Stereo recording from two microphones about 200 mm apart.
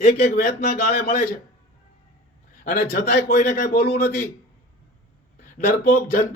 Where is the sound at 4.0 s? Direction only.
50° left (ahead or behind).